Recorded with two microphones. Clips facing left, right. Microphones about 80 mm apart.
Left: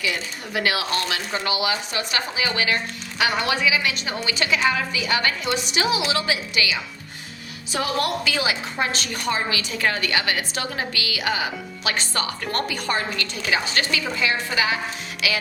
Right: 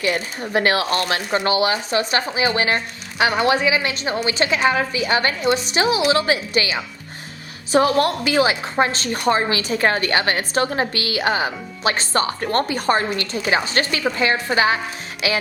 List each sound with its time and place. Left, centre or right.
0.0 s a woman's voice: right